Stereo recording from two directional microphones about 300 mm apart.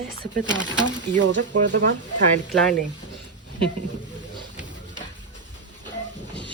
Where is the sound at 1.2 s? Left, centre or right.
Right.